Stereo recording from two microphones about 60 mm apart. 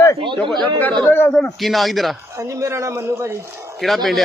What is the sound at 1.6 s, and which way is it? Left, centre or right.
Speech, centre.